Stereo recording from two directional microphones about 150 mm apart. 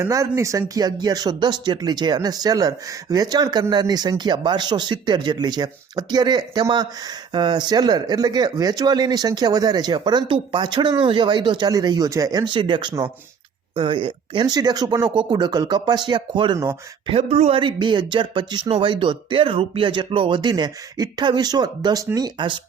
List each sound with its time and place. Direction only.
0.0 s speech: 20° right (ahead or behind)
17.1 s speech: 45° right (ahead or behind)
17.6 s speech: 30° right (ahead or behind)